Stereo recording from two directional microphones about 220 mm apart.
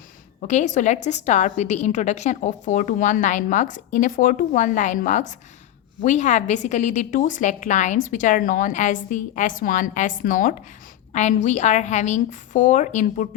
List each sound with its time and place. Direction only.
0.4 s a woman's voice: 35° left (ahead or behind)